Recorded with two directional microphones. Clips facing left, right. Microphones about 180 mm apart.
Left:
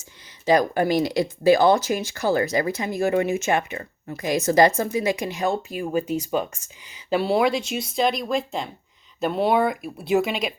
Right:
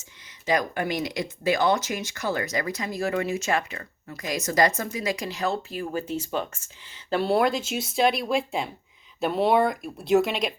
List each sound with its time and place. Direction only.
0.0 s speech: 35° left (ahead or behind); by 10.5 s centre (ahead or behind)